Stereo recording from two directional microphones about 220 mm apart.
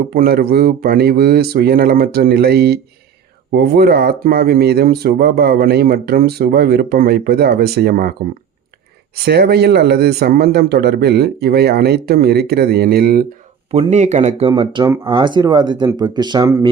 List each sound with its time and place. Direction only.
0.1 s speech: 40° right (ahead or behind)
9.1 s speech: 45° right (ahead or behind)
13.7 s speech: 25° right (ahead or behind)